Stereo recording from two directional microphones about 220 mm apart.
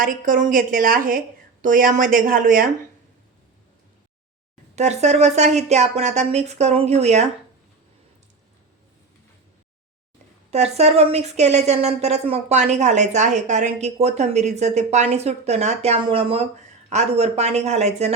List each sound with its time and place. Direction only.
0.0 s a woman's voice: 40° right (ahead or behind)
4.7 s a woman's voice: 30° right (ahead or behind)
10.5 s a woman's voice: 30° right (ahead or behind)